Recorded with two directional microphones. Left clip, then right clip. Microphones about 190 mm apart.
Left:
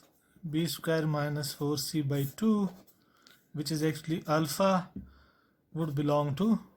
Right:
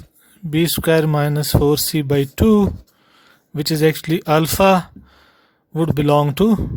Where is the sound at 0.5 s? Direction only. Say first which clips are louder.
Right 15 dB; 55° right (ahead or behind).